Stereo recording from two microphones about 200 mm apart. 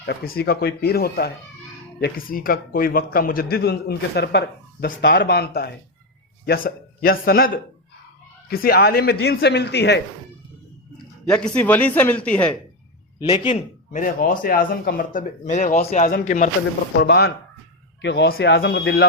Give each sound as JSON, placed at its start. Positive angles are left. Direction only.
{"t": 0.0, "sound": "a man's voice", "side_deg": 50}
{"t": 10.9, "sound": "speech", "side_deg": 5}
{"t": 13.2, "sound": "a man's voice", "side_deg": 25}
{"t": 13.9, "sound": "a man's voice", "side_deg": 45}
{"t": 17.0, "sound": "speech", "side_deg": 55}